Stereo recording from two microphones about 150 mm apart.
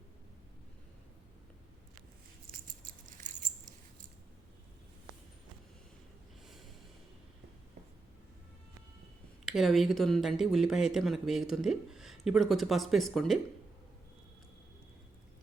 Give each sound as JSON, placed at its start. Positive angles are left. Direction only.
{"t": 2.5, "sound": "a sound", "side_deg": -60}
{"t": 6.4, "sound": "snort", "side_deg": 0}
{"t": 9.5, "sound": "speech", "side_deg": 0}